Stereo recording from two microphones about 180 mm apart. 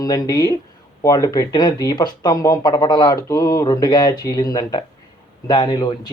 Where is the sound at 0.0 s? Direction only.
20° left (ahead or behind).